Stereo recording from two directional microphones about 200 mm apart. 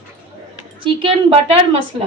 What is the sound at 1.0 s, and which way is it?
Speech, 25° right (ahead or behind).